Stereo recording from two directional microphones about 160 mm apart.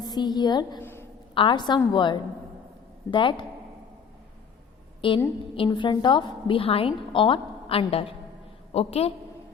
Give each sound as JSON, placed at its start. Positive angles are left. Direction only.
{"t": 0.0, "sound": "a woman's voice", "side_deg": 25}
{"t": 0.8, "sound": "a sound", "side_deg": 15}
{"t": 1.4, "sound": "a woman's voice", "side_deg": 30}
{"t": 4.9, "sound": "a woman's voice", "side_deg": 30}